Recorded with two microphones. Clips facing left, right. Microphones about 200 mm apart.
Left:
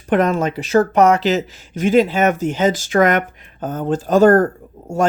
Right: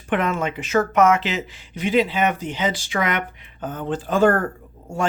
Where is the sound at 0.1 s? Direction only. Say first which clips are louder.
Left 6 dB; 40° left (ahead or behind).